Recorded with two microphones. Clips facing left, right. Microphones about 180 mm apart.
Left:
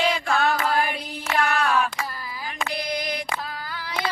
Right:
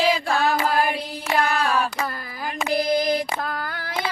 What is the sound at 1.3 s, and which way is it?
Female singing, 35° right (ahead or behind).